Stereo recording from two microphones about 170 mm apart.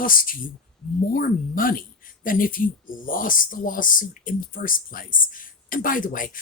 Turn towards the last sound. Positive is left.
turn(degrees=50)  # may be behind; listen again after turning